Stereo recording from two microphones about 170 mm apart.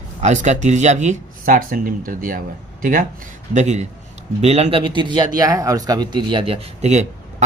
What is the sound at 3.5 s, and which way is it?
Speech, 45° right (ahead or behind).